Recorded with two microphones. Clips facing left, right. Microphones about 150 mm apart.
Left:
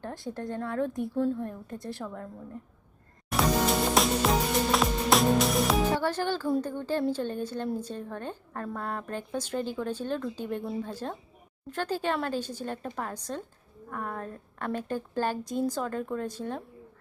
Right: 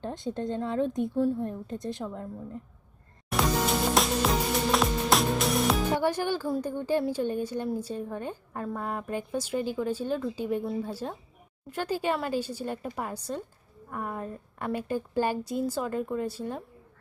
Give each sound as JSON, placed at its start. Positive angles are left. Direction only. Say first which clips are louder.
{"t": 0.0, "sound": "a woman's voice", "louder": "right 3 dB", "side_deg": -20}
{"t": 3.2, "sound": "music", "louder": "left 1 dB", "side_deg": 0}
{"t": 6.0, "sound": "a woman's voice", "louder": "right 2 dB", "side_deg": -15}